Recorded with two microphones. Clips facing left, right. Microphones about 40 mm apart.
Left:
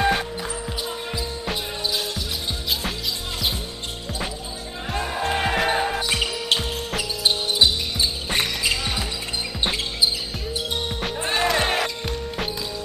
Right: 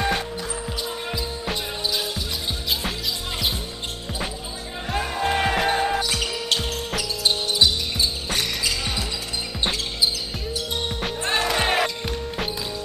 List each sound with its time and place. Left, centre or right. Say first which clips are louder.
0.0 s basketball bounce: left 3 dB; centre
4.9 s music: right 1 dB; centre
7.0 s basketball bounce: left 1 dB; centre
11.2 s music: left 1 dB; centre